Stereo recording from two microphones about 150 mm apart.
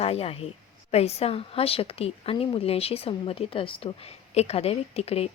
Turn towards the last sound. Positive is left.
turn(degrees=45)  # may be behind; listen again after turning